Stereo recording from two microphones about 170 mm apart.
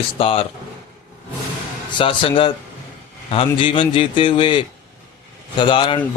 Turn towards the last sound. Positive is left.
turn(degrees=30)  # may be behind; listen again after turning